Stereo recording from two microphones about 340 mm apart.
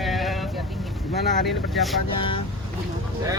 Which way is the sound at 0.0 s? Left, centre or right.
Centre.